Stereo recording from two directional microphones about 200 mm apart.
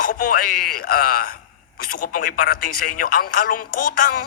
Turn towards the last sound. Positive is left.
turn(degrees=45)  # may be behind; listen again after turning